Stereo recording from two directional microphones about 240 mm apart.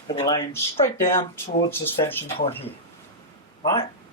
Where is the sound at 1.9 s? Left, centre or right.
Centre.